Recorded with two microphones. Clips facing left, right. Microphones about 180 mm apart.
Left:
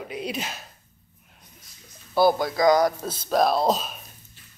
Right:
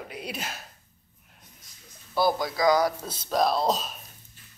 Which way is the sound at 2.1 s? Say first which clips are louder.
Left 5 dB; 25° left (ahead or behind).